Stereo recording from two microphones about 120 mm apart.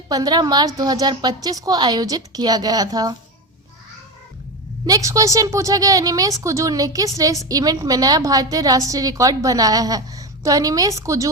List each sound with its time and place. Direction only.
0.1 s a woman's voice: 35° right (ahead or behind)
4.9 s a woman's voice: 30° right (ahead or behind)